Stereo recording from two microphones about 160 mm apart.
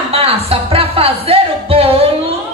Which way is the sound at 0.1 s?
35° right (ahead or behind).